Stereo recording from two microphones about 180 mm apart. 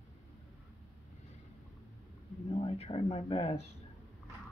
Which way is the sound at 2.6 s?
35° left (ahead or behind).